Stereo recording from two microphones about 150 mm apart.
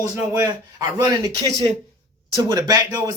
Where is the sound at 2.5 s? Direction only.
25° right (ahead or behind).